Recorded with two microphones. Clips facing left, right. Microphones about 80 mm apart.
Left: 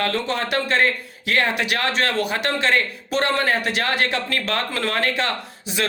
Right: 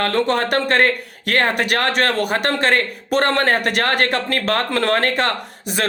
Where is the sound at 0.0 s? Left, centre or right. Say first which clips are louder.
Right 5 dB; right.